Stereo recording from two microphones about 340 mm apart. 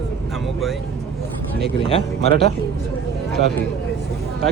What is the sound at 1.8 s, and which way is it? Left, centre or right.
Speech, centre.